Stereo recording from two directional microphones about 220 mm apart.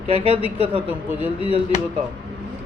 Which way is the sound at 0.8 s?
10° right (ahead or behind).